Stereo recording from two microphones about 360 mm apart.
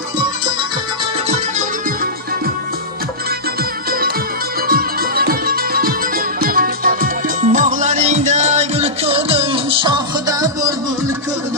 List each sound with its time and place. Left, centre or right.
4.7 s music: right